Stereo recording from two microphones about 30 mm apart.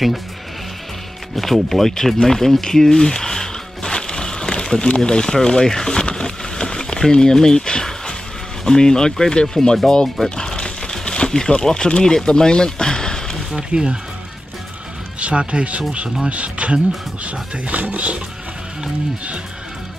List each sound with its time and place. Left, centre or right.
1.3 s speech: centre
3.9 s music: left
4.8 s speech: left
6.1 s a sound: left
8.6 s speech: left
10.0 s speech: centre
10.3 s crumpling: left
13.6 s speech: right
15.1 s speech: right